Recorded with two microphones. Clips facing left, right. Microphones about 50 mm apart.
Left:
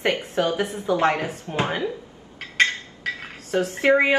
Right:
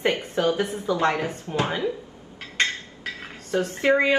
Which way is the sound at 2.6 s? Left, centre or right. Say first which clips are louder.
Left 3 dB; left.